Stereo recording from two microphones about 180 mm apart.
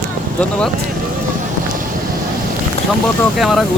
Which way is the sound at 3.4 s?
Centre (ahead or behind).